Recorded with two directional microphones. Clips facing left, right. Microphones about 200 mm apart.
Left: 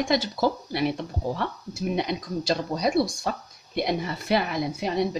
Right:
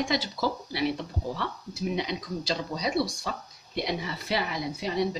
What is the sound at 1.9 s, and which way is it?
Speech, 50° left (ahead or behind).